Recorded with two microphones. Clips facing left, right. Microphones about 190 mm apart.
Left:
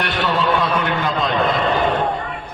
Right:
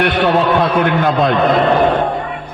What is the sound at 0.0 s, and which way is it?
A man's voice, 55° right (ahead or behind).